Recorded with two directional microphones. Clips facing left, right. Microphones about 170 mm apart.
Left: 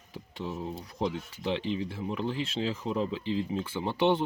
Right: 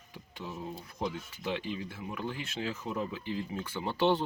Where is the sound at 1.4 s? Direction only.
30° left (ahead or behind).